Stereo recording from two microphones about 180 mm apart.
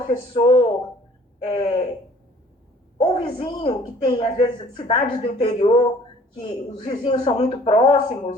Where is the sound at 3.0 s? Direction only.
25° left (ahead or behind).